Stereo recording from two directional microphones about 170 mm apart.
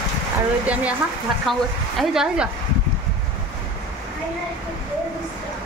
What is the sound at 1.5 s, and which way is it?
Speech, centre (ahead or behind).